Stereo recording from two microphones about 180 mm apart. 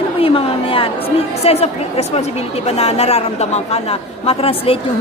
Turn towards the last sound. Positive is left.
turn(degrees=30)  # may be behind; listen again after turning